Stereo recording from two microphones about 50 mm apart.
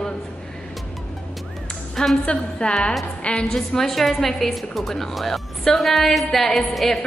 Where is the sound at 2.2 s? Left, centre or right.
Left.